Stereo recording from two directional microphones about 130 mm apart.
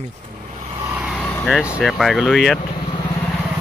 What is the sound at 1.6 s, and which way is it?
Speech, 5° right (ahead or behind).